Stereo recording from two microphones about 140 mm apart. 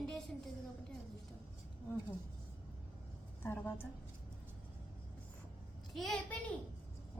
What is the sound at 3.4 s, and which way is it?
Speech, 15° left (ahead or behind).